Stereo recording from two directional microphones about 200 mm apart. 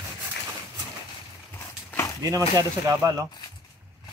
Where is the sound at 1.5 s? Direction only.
15° left (ahead or behind).